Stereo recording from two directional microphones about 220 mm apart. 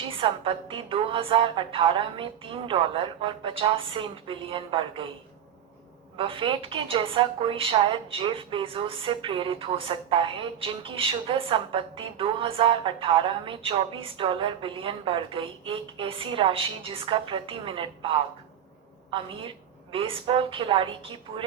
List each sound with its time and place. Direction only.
0.1 s a woman's voice: 25° right (ahead or behind)
6.1 s a woman's voice: 25° right (ahead or behind)